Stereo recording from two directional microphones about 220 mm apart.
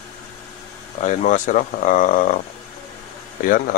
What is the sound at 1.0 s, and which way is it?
Speech, 35° left (ahead or behind).